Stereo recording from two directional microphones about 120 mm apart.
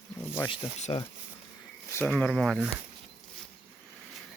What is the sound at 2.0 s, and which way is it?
Speech, centre (ahead or behind).